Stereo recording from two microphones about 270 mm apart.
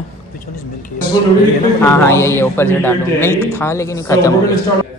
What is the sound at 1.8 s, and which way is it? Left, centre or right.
A man's voice, centre.